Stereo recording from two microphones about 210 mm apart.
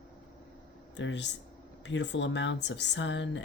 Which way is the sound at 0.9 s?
60° left (ahead or behind).